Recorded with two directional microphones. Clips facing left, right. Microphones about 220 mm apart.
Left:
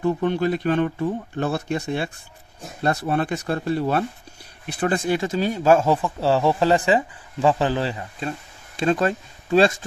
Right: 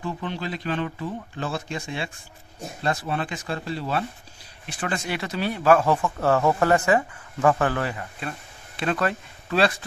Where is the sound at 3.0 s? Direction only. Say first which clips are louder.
Left 6 dB; 45° left (ahead or behind).